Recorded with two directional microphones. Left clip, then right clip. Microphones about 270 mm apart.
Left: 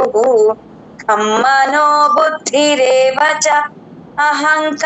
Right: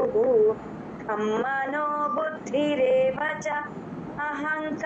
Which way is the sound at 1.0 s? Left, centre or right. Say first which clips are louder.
Left 15 dB; left.